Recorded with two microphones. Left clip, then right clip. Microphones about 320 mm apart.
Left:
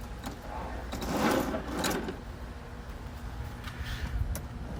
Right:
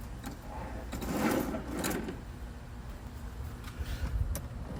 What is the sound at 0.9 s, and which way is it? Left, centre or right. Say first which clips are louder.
Sewing machine: left 3 dB; centre.